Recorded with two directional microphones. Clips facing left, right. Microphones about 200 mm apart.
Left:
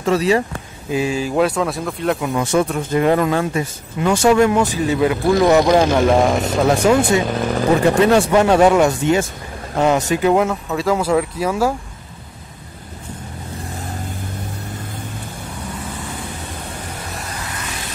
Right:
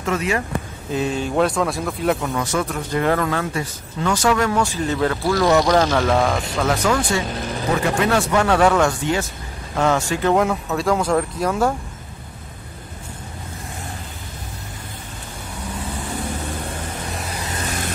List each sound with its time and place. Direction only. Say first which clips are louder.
0.0 s speech: left 6 dB; 35° left (ahead or behind)
0.9 s speech: left 2 dB; 5° left (ahead or behind)
2.3 s speech: left 5 dB; 25° left (ahead or behind)
6.0 s speech: left 4 dB; 30° left (ahead or behind)
10.3 s speech: left 2 dB; centre (ahead or behind)
17.6 s vehicle: right 4 dB; 50° right (ahead or behind)